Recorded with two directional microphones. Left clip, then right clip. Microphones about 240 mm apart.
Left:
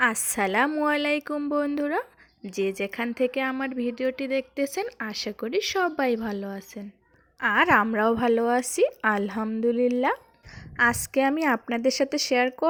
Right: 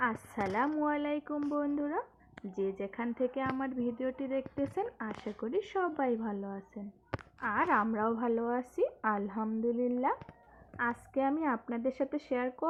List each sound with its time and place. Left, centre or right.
0.0 s speech: left